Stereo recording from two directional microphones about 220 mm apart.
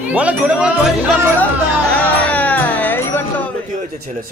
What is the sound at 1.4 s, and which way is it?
Music, 5° left (ahead or behind).